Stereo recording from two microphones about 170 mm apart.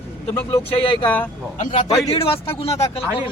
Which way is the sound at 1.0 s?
10° left (ahead or behind).